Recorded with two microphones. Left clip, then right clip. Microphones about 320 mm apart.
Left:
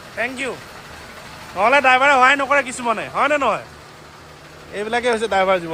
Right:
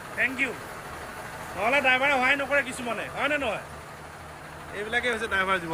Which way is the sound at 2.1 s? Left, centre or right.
Left.